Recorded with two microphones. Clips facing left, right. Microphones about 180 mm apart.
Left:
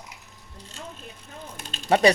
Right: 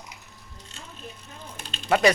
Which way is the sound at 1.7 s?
35° left (ahead or behind).